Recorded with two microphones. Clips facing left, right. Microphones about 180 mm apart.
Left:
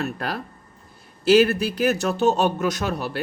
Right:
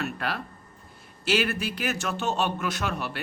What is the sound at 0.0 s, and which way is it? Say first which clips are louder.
A man's voice: left 3 dB; 40° left (ahead or behind).